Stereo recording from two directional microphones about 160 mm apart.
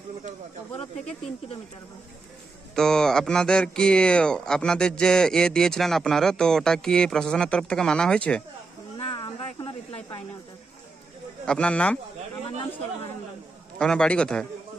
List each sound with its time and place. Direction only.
2.7 s speech: 5° left (ahead or behind)
8.9 s snake: 30° left (ahead or behind)
11.4 s speech: 5° left (ahead or behind)
13.7 s speech: 5° left (ahead or behind)